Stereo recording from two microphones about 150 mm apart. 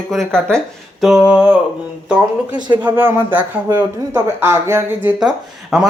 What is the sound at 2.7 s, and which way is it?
Mantra, 10° right (ahead or behind).